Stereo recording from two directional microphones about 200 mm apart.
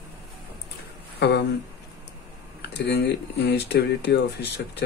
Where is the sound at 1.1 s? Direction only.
55° left (ahead or behind).